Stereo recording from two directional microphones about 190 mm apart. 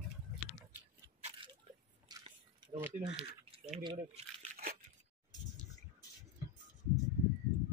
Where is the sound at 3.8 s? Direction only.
25° right (ahead or behind).